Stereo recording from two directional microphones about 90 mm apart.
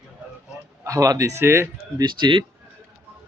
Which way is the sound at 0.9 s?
40° right (ahead or behind).